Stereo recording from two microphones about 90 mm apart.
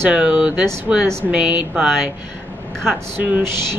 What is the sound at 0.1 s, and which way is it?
Speech, 10° right (ahead or behind).